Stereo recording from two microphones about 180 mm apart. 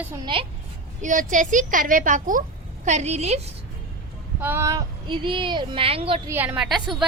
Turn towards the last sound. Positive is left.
turn(degrees=0)  # may be behind; listen again after turning